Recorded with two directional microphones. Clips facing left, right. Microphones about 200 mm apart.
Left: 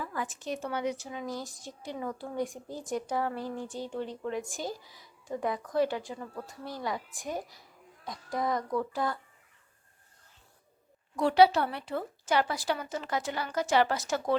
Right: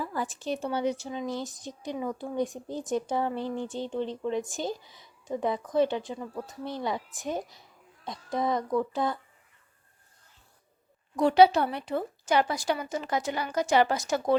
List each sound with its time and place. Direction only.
0.0 s speech: 30° right (ahead or behind)
11.2 s speech: 20° right (ahead or behind)